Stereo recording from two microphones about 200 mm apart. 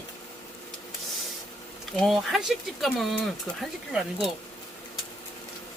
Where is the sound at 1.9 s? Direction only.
Centre (ahead or behind).